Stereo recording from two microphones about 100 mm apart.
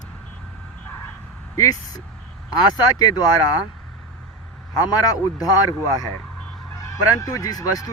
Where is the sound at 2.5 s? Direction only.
40° left (ahead or behind).